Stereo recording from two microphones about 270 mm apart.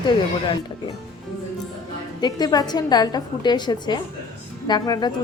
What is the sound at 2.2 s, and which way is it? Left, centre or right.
A woman's voice, centre.